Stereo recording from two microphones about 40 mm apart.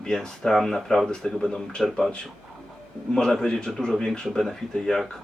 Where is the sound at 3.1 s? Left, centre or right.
Centre.